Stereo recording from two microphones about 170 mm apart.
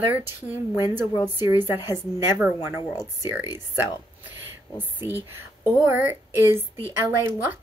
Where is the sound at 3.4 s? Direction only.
20° left (ahead or behind).